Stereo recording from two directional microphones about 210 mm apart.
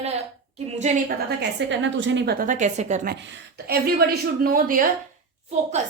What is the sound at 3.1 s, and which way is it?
Speech, 50° right (ahead or behind).